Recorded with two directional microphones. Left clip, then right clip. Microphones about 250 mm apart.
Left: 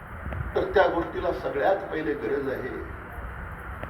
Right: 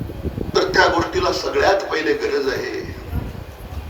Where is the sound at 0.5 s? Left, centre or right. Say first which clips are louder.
Right 7 dB; right.